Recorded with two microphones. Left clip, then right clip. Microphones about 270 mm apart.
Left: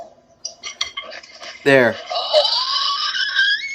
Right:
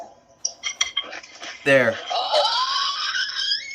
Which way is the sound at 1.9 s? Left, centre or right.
Centre.